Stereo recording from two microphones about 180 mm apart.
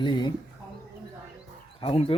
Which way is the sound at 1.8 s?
30° left (ahead or behind).